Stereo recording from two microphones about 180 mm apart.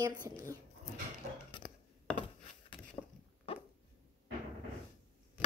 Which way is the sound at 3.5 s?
30° left (ahead or behind).